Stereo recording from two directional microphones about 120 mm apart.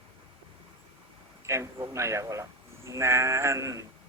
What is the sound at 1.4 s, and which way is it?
Speech, 25° right (ahead or behind).